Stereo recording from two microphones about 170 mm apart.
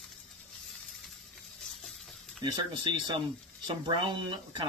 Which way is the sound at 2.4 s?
25° right (ahead or behind).